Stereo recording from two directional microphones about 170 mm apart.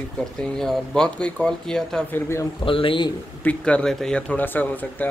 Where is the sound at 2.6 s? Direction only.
30° left (ahead or behind).